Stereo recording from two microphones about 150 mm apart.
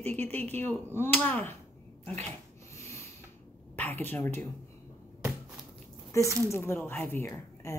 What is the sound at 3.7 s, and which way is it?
Speech, 10° left (ahead or behind).